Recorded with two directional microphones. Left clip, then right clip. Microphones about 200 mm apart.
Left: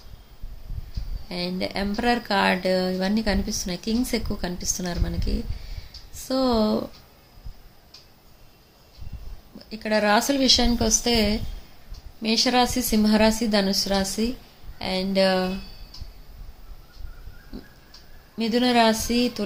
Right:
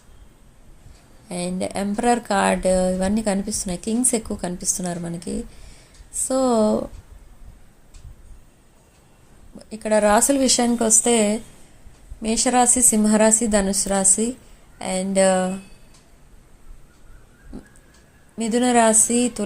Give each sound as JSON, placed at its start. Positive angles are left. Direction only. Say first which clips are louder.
{"t": 1.3, "sound": "speech", "louder": "right 2 dB", "side_deg": -15}
{"t": 9.6, "sound": "speech", "louder": "right 4 dB", "side_deg": -15}
{"t": 17.5, "sound": "a sound", "louder": "right 1 dB", "side_deg": -10}
{"t": 18.3, "sound": "speech", "louder": "right 2 dB", "side_deg": -15}